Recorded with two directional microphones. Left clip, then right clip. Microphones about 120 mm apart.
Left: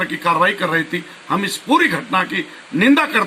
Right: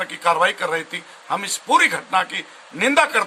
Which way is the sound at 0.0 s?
45° right (ahead or behind).